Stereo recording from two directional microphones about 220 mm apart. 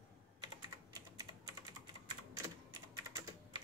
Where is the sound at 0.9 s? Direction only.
15° right (ahead or behind).